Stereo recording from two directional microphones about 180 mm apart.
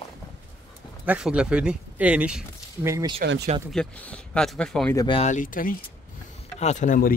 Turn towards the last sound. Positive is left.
turn(degrees=50)  # may be behind; listen again after turning